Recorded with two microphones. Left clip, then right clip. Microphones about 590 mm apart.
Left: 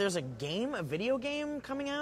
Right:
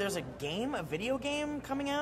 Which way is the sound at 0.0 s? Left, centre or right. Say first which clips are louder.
Left 2 dB; left.